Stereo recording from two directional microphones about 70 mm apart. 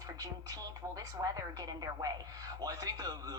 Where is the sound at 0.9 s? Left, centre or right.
Right.